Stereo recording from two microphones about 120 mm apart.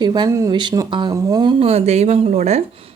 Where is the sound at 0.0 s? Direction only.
35° right (ahead or behind).